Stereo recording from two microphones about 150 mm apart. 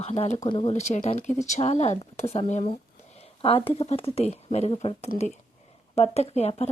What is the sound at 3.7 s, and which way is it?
Speech, 40° left (ahead or behind).